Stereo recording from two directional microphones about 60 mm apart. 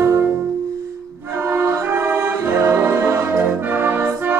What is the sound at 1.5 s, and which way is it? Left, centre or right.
Music, right.